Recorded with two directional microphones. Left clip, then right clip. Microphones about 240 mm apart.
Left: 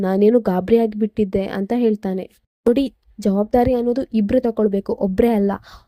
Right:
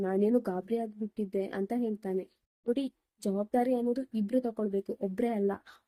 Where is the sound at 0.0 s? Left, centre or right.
Left.